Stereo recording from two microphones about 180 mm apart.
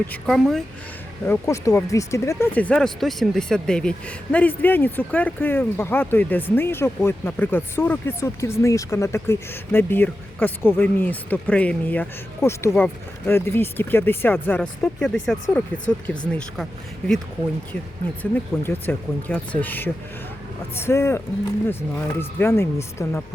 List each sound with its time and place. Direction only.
0.1 s speech: centre (ahead or behind)
1.3 s speech: 15° left (ahead or behind)
2.6 s speech: 5° left (ahead or behind)
18.2 s speech: 10° left (ahead or behind)